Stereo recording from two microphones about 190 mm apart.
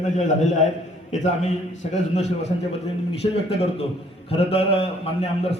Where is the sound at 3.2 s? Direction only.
30° left (ahead or behind).